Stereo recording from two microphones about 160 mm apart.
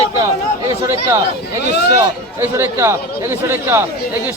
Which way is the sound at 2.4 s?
15° right (ahead or behind).